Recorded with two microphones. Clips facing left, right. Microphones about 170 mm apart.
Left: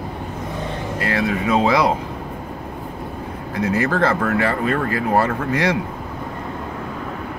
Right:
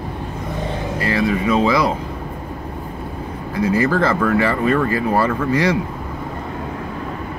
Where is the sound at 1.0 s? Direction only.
60° left (ahead or behind).